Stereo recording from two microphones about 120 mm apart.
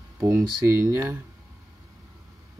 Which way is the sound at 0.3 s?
25° right (ahead or behind).